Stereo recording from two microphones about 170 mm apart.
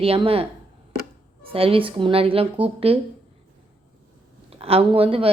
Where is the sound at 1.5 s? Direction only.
35° right (ahead or behind).